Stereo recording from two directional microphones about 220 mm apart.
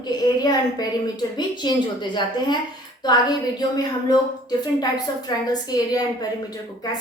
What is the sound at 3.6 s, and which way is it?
A woman's voice, 20° left (ahead or behind).